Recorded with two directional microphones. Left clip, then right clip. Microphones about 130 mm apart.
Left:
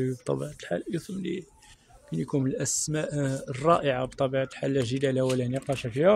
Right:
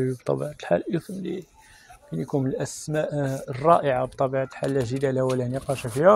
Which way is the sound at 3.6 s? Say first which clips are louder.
Right 4 dB; 40° left (ahead or behind).